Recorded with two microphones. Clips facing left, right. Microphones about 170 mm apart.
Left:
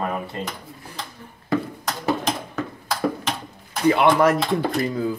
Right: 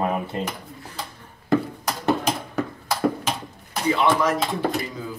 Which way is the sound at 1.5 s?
Centre (ahead or behind).